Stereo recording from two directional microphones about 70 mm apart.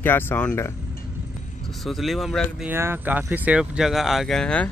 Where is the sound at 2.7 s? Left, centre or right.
Right.